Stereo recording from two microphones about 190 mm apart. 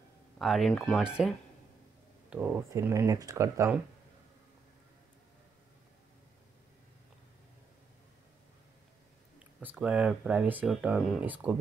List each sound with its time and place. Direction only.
0.4 s speech: centre (ahead or behind)
1.0 s speech: 5° right (ahead or behind)
9.6 s speech: 5° right (ahead or behind)